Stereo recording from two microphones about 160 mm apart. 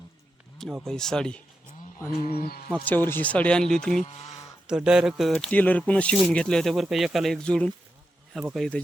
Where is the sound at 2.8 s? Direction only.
10° left (ahead or behind).